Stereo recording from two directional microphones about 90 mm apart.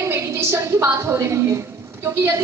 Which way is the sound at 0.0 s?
30° right (ahead or behind).